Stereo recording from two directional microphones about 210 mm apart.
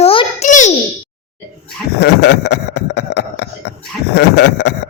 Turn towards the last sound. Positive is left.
turn(degrees=55)  # may be behind; listen again after turning